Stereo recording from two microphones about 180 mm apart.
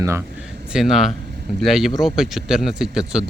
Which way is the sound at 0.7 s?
Centre (ahead or behind).